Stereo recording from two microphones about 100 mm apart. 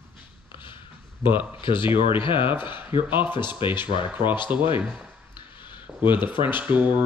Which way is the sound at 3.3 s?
50° left (ahead or behind).